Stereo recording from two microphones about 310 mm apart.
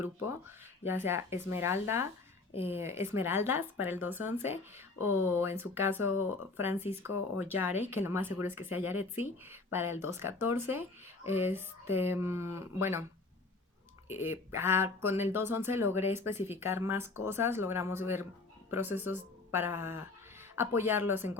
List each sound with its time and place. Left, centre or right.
0.9 s speech: centre
4.9 s speech: left
5.2 s speech: centre
14.2 s speech: centre